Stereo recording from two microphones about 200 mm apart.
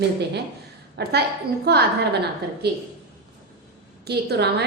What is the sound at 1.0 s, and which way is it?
Speech, 55° right (ahead or behind).